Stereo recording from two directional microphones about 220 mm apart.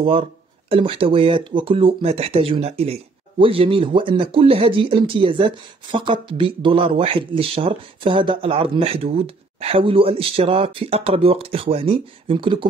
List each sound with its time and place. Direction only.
0.0 s speech: 25° right (ahead or behind)